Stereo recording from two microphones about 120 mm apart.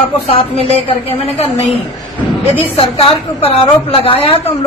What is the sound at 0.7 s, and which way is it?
Speech, 55° left (ahead or behind).